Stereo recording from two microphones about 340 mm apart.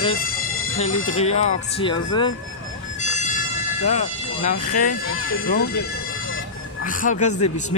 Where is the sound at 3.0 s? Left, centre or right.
Left.